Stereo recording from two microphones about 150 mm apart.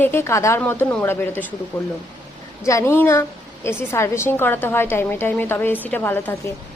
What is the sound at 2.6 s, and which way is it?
A woman's voice, 20° left (ahead or behind).